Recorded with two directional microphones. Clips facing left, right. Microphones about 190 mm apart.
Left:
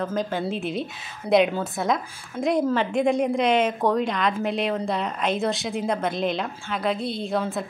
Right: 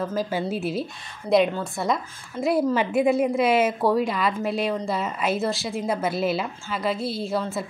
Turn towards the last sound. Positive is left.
turn(degrees=0)  # may be behind; listen again after turning